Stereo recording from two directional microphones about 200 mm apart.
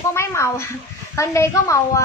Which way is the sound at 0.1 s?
15° left (ahead or behind).